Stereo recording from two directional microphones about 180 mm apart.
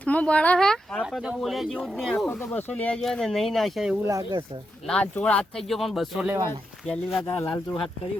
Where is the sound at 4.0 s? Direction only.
20° right (ahead or behind).